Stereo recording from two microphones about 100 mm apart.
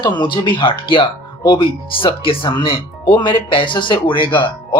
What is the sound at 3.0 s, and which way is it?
Speech, 45° left (ahead or behind).